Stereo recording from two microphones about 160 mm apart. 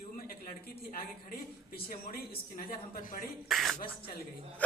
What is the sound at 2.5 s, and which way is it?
Speech, 60° left (ahead or behind).